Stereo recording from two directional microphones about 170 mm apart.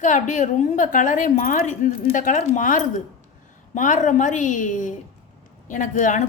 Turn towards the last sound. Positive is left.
turn(degrees=50)  # may be behind; listen again after turning